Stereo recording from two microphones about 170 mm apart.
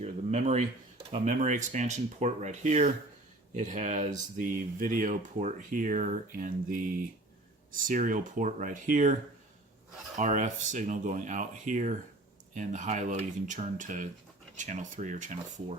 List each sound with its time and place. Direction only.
0.0 s speech: 40° right (ahead or behind)
10.2 s speech: 45° right (ahead or behind)